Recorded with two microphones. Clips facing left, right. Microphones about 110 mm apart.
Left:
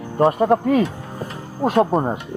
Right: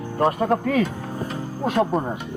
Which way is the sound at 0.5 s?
Centre (ahead or behind).